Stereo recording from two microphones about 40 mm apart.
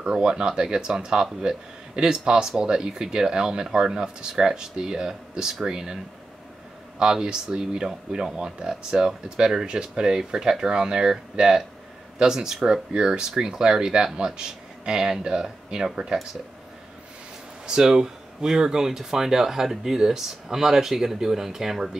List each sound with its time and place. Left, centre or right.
0.0 s speech: right
7.0 s speech: centre
12.9 s speech: right
13.4 s speech: centre
17.6 s speech: centre